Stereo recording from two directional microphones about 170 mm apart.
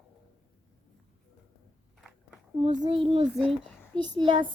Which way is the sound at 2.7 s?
35° right (ahead or behind).